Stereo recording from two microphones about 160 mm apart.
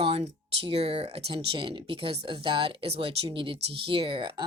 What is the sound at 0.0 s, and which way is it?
Speech, 35° right (ahead or behind).